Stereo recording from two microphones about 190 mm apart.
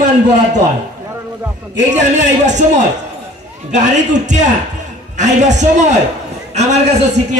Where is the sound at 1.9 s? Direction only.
40° right (ahead or behind).